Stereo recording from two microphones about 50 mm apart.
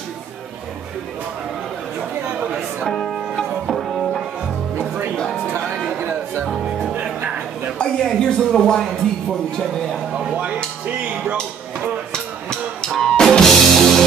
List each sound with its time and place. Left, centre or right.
2.9 s music: centre
6.9 s music: right
7.8 s speech: centre
11.0 s speech: right
12.1 s music: centre